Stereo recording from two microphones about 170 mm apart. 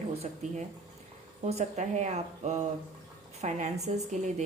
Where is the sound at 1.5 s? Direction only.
40° right (ahead or behind).